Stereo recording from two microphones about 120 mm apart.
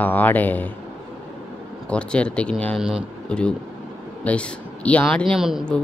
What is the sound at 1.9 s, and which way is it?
Speech, 10° left (ahead or behind).